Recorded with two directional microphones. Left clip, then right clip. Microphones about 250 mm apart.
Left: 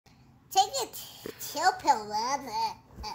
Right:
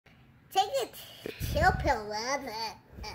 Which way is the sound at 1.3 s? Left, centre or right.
Centre.